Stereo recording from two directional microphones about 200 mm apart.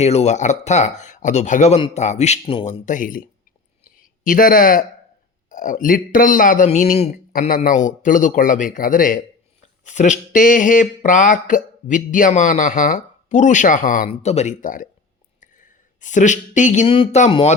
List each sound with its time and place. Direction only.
0.0 s speech: 35° left (ahead or behind)
2.8 s a man's voice: 40° left (ahead or behind)
7.3 s a man's voice: 45° left (ahead or behind)